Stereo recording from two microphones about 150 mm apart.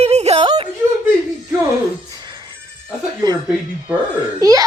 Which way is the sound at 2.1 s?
30° right (ahead or behind).